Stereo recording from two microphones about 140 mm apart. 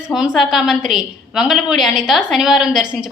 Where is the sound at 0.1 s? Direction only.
Centre (ahead or behind).